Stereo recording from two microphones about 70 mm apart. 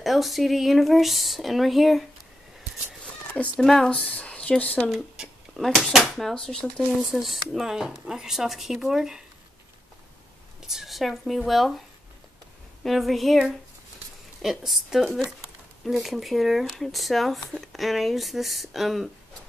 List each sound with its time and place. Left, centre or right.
0.0 s speech: centre
3.5 s speech: centre
3.9 s speech: centre
5.1 s a sound: centre
6.1 s speech: centre
7.0 s speech: centre
10.7 s speech: centre
12.8 s speech: centre